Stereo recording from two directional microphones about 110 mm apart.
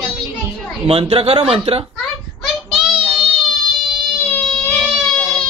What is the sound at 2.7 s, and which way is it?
Child singing, 5° right (ahead or behind).